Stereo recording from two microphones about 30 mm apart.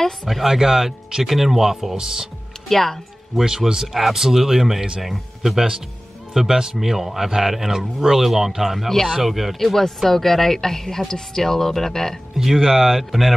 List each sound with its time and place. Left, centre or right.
0.5 s speech: centre
2.7 s a woman's voice: centre
3.4 s speech: centre
6.3 s a man's voice: centre
8.7 s a woman's voice: centre
9.1 s speech: centre
9.6 s a woman's voice: centre
12.4 s speech: centre